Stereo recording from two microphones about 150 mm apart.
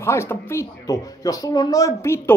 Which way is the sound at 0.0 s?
15° left (ahead or behind).